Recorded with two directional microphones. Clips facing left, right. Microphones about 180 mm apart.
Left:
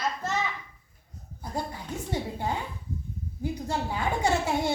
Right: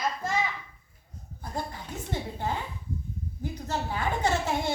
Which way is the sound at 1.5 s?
10° left (ahead or behind).